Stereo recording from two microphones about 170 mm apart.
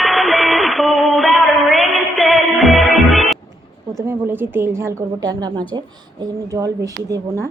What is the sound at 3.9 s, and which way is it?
A woman's voice, 15° right (ahead or behind).